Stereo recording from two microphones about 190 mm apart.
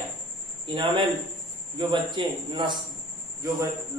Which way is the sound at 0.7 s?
25° right (ahead or behind).